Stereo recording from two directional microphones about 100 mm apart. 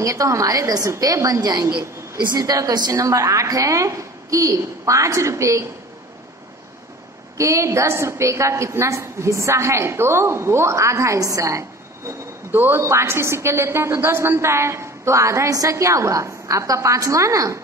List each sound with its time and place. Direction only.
0.0 s a woman's voice: 30° right (ahead or behind)
7.3 s a woman's voice: 30° right (ahead or behind)
12.4 s a woman's voice: 20° right (ahead or behind)